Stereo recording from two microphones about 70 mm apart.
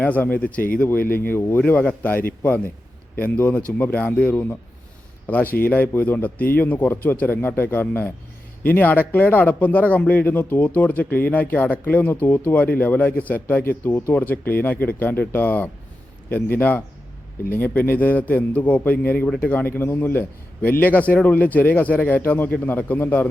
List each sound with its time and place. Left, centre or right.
0.0 s speech: left
1.6 s speech: left